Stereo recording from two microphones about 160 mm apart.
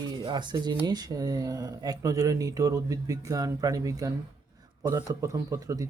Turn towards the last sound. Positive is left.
turn(degrees=-20)  # may be behind; listen again after turning